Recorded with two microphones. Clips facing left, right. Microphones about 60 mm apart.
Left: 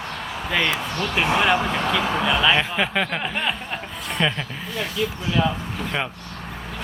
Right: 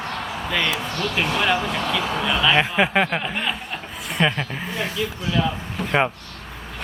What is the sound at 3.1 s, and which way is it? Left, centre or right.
Speech, centre.